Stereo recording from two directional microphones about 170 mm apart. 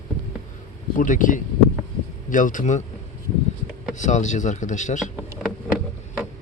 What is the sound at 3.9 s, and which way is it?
Speech, 45° left (ahead or behind).